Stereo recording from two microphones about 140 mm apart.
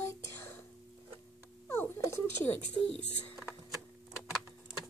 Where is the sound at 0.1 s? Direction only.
20° left (ahead or behind).